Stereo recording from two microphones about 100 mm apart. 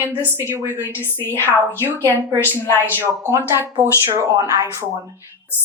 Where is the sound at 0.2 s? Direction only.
20° left (ahead or behind).